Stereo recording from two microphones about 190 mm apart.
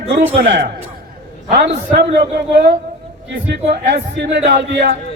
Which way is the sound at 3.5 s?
65° right (ahead or behind).